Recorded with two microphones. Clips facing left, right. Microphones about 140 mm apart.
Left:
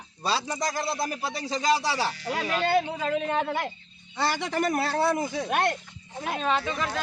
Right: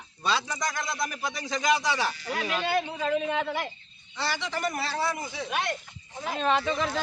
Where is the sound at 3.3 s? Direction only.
45° left (ahead or behind).